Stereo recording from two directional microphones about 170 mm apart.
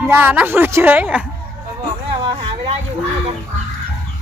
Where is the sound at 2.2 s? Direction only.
30° right (ahead or behind).